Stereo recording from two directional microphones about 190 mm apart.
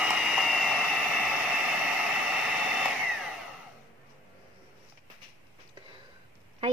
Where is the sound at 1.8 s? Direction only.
5° right (ahead or behind).